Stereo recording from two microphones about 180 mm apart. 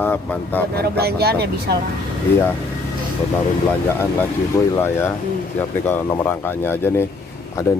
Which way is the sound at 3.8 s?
10° left (ahead or behind).